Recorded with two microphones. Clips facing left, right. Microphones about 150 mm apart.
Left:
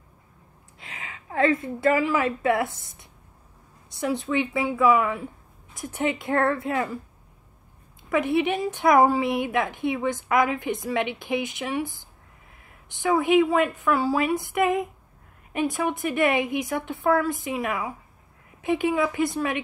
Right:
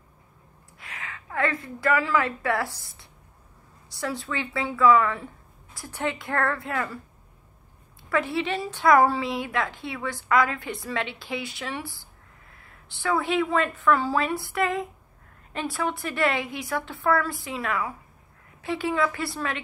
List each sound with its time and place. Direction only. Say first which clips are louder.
0.7 s a woman's voice: right 1 dB; 20° left (ahead or behind)
8.1 s a woman's voice: left 4 dB; 20° left (ahead or behind)